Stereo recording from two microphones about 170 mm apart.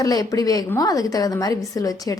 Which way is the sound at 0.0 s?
20° left (ahead or behind).